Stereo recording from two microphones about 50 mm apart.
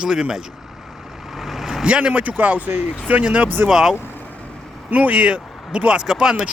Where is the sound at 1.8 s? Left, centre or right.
Right.